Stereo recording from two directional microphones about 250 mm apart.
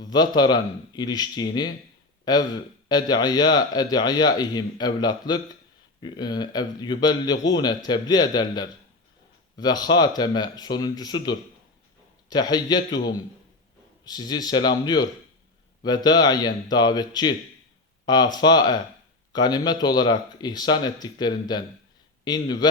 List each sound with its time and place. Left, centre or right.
0.0 s speech: centre
14.0 s speech: centre
15.8 s speech: centre